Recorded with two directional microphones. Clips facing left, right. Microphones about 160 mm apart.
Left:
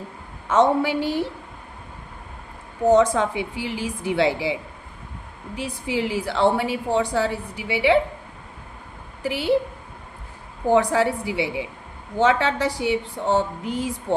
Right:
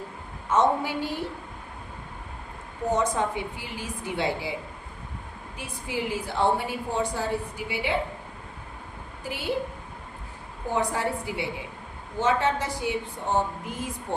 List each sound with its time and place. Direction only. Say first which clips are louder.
0.4 s a woman's voice: left 5 dB; 90° left
2.9 s a woman's voice: left 8 dB; 90° left
5.5 s a woman's voice: left 7 dB; 85° left
9.2 s a woman's voice: left 9 dB; 85° left
10.7 s a woman's voice: left 8 dB; 90° left